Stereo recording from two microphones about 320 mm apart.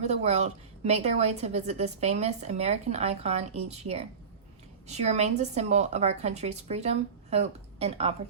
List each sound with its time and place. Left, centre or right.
0.0 s a woman's voice: centre